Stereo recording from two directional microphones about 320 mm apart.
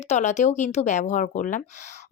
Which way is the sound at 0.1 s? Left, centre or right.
Left.